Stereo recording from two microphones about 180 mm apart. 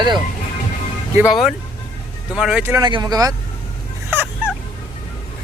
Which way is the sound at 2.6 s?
15° right (ahead or behind).